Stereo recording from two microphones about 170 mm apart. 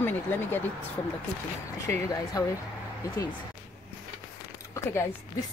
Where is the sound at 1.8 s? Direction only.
15° left (ahead or behind).